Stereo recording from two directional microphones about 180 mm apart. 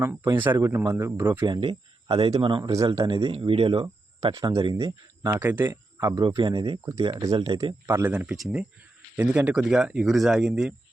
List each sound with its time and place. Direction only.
0.0 s a man's voice: 15° right (ahead or behind)
7.9 s speech: 10° right (ahead or behind)